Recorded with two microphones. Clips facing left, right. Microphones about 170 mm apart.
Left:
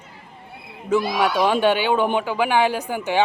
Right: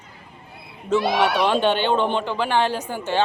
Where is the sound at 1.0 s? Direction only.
75° right (ahead or behind).